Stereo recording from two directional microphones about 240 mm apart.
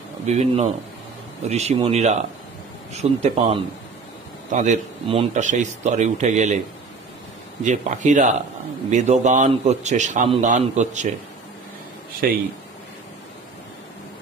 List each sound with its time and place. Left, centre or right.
0.3 s a man's voice: right
7.6 s a man's voice: right
12.2 s speech: right